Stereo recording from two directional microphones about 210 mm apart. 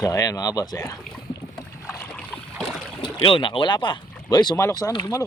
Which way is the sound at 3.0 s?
25° left (ahead or behind).